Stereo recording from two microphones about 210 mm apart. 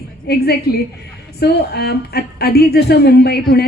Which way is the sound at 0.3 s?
50° left (ahead or behind).